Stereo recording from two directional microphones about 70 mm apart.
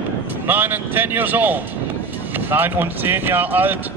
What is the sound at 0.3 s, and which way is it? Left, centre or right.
A man's voice, right.